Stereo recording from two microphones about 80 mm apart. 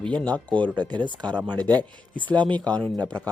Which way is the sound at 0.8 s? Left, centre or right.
Right.